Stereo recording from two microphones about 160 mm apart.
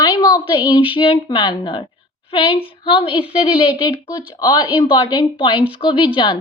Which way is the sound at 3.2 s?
10° right (ahead or behind).